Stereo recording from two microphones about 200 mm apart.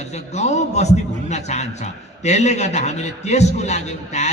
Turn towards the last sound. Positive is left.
turn(degrees=35)  # may be behind; listen again after turning